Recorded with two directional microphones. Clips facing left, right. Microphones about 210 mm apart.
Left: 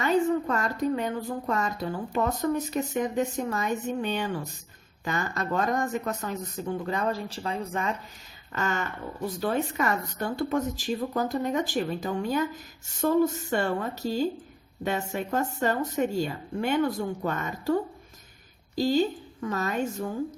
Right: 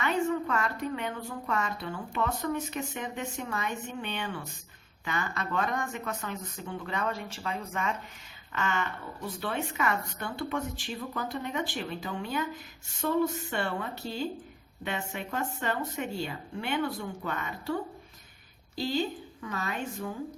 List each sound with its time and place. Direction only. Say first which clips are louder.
0.0 s a woman's voice: left 5 dB; 35° left (ahead or behind)
18.8 s a woman's voice: left 6 dB; 40° left (ahead or behind)